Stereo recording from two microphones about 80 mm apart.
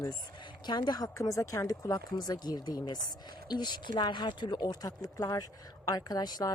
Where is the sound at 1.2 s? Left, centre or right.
Left.